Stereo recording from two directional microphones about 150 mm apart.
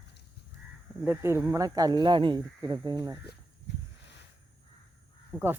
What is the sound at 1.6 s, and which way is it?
Speech, 25° right (ahead or behind).